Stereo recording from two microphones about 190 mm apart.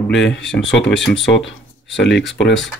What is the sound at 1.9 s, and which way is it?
Speech, 65° left (ahead or behind).